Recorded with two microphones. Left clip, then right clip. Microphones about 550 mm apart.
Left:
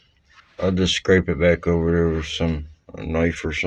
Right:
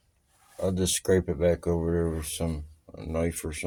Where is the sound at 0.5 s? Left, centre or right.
Right.